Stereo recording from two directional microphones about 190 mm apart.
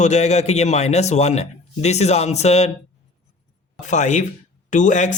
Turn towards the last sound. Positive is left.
turn(degrees=40)  # may be behind; listen again after turning